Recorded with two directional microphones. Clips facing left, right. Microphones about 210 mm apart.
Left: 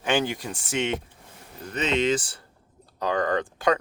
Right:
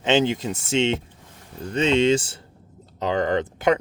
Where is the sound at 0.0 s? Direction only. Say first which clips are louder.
Right 5 dB; 20° right (ahead or behind).